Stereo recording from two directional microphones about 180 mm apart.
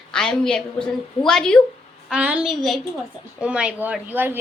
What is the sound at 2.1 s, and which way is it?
A woman's voice, 5° right (ahead or behind).